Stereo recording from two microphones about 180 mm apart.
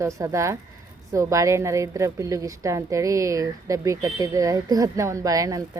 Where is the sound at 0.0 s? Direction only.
15° right (ahead or behind).